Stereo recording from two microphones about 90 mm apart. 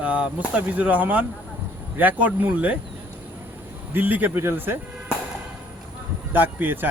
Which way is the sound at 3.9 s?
20° right (ahead or behind).